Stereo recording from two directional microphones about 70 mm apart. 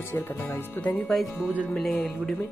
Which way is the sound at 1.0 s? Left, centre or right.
Centre.